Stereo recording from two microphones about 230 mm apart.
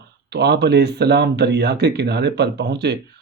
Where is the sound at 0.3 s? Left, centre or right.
Right.